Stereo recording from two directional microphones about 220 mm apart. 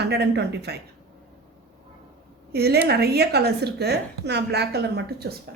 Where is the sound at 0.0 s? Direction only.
50° right (ahead or behind).